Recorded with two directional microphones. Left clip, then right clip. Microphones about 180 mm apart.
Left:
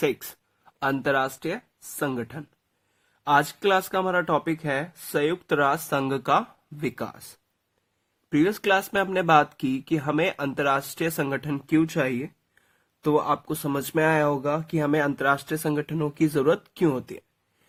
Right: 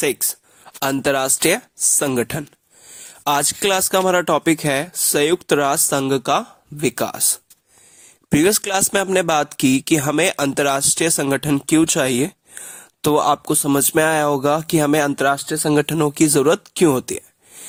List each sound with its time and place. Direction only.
0.6 s speech: 35° right (ahead or behind)
8.3 s speech: 45° right (ahead or behind)
11.8 s speech: 60° right (ahead or behind); by 15.5 s 35° right (ahead or behind)
15.7 s speech: 50° right (ahead or behind)